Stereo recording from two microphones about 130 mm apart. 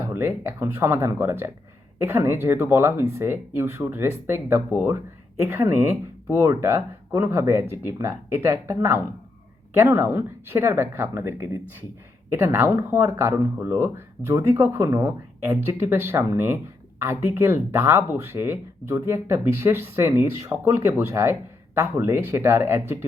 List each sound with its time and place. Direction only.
0.0 s speech: 15° right (ahead or behind)